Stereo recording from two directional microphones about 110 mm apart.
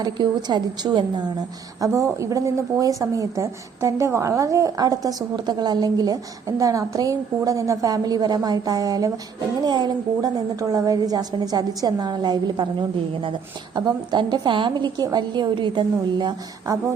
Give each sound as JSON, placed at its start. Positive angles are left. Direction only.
{"t": 0.0, "sound": "a woman's voice", "side_deg": -40}
{"t": 1.8, "sound": "a woman's voice", "side_deg": -25}
{"t": 13.7, "sound": "a woman's voice", "side_deg": -40}